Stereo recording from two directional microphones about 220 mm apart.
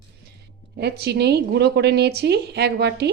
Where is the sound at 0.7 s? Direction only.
45° right (ahead or behind).